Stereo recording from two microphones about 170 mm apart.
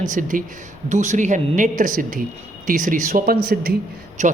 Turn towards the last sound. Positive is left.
turn(degrees=-45)  # may be behind; listen again after turning